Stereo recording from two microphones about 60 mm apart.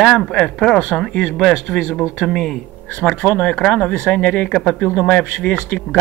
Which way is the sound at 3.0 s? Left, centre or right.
Left.